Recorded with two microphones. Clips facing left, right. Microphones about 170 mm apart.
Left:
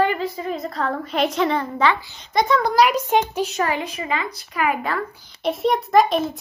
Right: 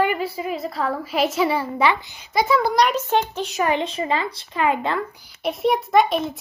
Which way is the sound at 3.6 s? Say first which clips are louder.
Right 7 dB; 20° right (ahead or behind).